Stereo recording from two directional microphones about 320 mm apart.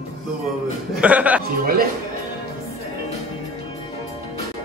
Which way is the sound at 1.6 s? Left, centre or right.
Right.